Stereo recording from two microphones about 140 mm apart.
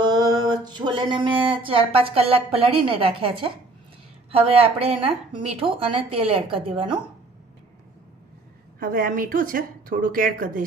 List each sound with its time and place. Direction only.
0.0 s a sound: 30° right (ahead or behind)
4.3 s speech: 45° right (ahead or behind)
8.8 s a woman's voice: 80° right